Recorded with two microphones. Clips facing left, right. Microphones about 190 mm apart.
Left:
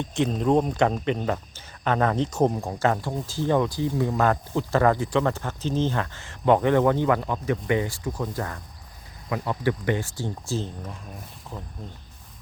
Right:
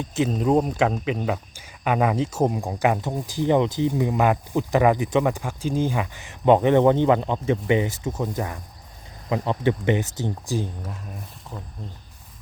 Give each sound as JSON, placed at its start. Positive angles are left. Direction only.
{"t": 0.0, "sound": "speech", "side_deg": -5}
{"t": 10.8, "sound": "speech", "side_deg": -5}